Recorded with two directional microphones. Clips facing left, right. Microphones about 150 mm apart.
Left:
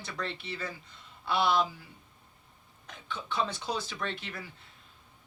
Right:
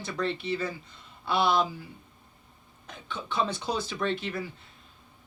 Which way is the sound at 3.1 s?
25° right (ahead or behind).